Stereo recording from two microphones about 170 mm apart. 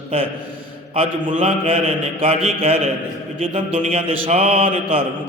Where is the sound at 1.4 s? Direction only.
35° right (ahead or behind).